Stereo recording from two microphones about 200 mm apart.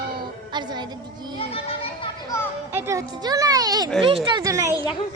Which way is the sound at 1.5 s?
30° left (ahead or behind).